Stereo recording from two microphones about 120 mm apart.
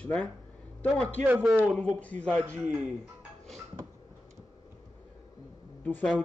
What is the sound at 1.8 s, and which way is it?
Speech, 10° left (ahead or behind).